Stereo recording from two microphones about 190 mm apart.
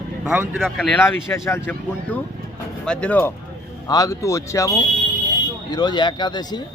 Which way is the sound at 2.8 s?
5° left (ahead or behind).